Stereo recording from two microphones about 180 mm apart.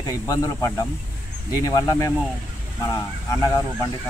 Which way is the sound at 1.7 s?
20° left (ahead or behind).